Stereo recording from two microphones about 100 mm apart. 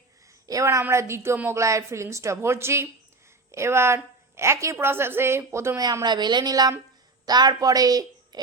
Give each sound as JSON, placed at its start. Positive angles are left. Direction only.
{"t": 0.4, "sound": "a woman's voice", "side_deg": -35}
{"t": 5.8, "sound": "a woman's voice", "side_deg": -40}